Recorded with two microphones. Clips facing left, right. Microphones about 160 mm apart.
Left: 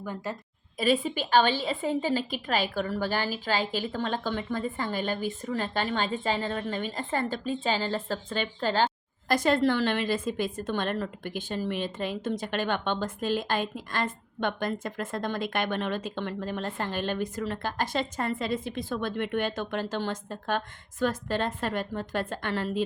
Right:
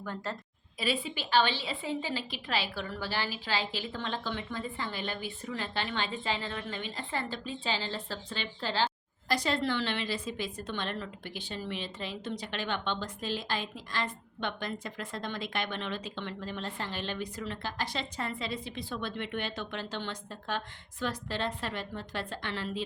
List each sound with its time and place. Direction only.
0.0 s a woman's voice: 10° left (ahead or behind)
0.8 s a woman's voice: 45° left (ahead or behind)